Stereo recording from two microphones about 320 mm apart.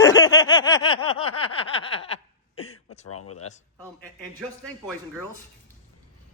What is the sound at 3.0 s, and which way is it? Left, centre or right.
Speech, left.